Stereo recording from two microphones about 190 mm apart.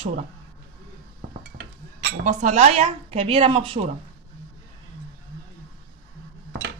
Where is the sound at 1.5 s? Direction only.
45° right (ahead or behind).